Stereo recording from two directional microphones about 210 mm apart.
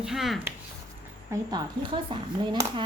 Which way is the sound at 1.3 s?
20° right (ahead or behind).